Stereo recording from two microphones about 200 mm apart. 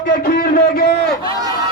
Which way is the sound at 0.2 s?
45° left (ahead or behind).